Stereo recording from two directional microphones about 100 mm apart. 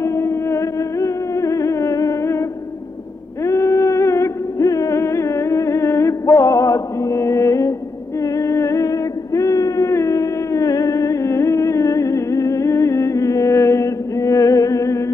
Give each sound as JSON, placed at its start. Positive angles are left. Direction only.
{"t": 0.0, "sound": "music", "side_deg": 30}
{"t": 3.4, "sound": "music", "side_deg": 30}